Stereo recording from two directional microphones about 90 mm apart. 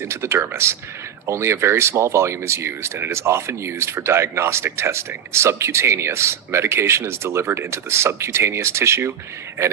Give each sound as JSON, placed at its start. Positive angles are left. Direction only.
{"t": 0.0, "sound": "speech", "side_deg": -30}